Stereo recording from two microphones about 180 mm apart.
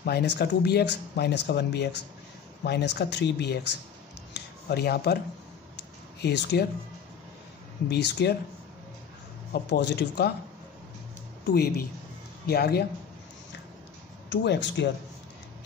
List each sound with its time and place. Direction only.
0.0 s speech: 65° left (ahead or behind)
4.3 s a sound: 65° left (ahead or behind)
6.2 s speech: 70° left (ahead or behind)
7.9 s speech: 65° left (ahead or behind)
9.5 s speech: 65° left (ahead or behind)
11.4 s a woman's voice: 60° left (ahead or behind)
14.3 s speech: 80° left